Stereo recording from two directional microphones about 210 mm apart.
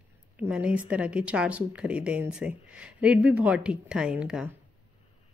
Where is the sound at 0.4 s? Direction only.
5° right (ahead or behind).